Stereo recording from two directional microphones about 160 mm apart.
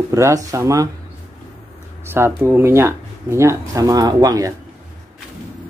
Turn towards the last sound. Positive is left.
turn(degrees=-20)  # may be behind; listen again after turning